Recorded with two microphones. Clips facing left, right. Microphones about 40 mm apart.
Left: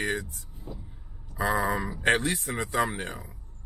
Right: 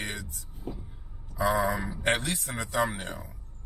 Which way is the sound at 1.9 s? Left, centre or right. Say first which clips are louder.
Left 3 dB; left.